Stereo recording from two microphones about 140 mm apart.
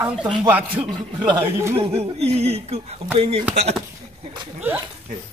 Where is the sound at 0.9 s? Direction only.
35° right (ahead or behind).